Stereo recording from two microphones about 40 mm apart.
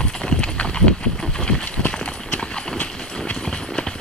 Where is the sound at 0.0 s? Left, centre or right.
Left.